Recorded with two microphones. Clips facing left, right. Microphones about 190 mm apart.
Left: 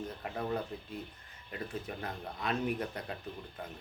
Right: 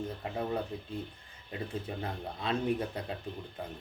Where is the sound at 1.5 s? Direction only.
25° right (ahead or behind).